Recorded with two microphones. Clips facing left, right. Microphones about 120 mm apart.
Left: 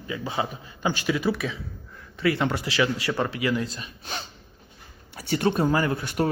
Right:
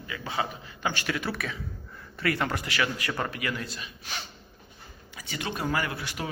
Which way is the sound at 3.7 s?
30° left (ahead or behind).